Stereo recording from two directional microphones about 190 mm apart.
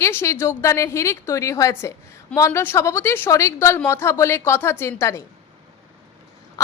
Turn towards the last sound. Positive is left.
turn(degrees=15)  # may be behind; listen again after turning